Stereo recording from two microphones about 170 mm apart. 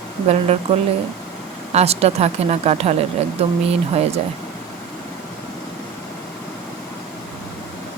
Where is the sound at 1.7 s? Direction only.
40° right (ahead or behind).